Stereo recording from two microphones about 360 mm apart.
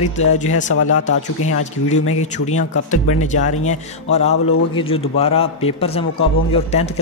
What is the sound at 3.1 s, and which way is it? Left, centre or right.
Speech, left.